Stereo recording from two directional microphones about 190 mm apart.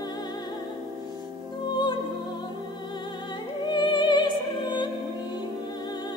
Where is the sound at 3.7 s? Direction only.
25° left (ahead or behind).